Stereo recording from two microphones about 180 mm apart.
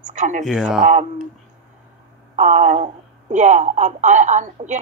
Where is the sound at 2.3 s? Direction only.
45° right (ahead or behind).